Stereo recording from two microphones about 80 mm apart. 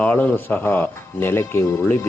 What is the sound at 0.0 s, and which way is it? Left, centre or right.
Speech, left.